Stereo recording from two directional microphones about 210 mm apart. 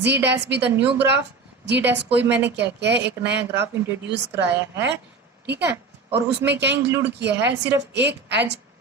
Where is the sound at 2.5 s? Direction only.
55° right (ahead or behind).